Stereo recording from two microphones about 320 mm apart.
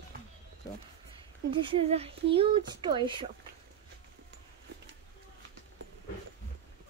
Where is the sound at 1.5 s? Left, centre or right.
Centre.